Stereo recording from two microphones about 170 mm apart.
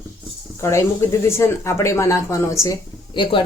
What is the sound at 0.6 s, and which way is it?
Speech, 15° left (ahead or behind).